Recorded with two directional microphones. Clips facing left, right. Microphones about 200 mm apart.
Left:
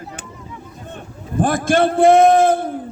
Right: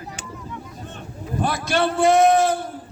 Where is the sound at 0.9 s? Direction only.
50° left (ahead or behind).